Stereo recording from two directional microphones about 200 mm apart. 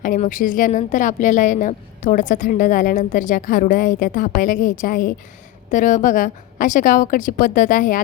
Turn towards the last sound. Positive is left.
turn(degrees=40)  # may be behind; listen again after turning